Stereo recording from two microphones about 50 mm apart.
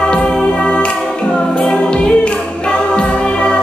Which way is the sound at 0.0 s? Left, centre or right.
Centre.